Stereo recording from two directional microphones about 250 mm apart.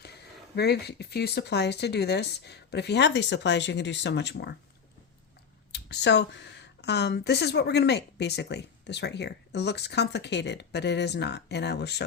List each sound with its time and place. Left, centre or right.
0.5 s speech: left
5.7 s speech: left